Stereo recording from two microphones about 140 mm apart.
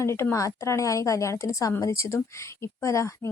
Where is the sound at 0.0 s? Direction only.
20° left (ahead or behind).